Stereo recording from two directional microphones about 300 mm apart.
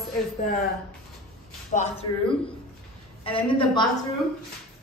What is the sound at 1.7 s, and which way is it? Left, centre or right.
Speech, left.